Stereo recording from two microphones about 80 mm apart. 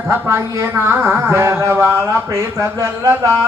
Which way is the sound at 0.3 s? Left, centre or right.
Right.